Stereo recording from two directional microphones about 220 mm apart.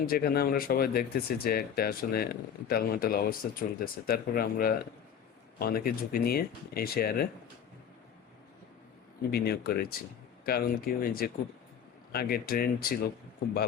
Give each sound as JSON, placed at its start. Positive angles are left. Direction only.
{"t": 0.0, "sound": "speech", "side_deg": 45}
{"t": 9.3, "sound": "speech", "side_deg": 45}